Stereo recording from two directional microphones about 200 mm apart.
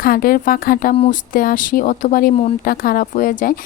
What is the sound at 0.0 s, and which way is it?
Speech, 45° left (ahead or behind).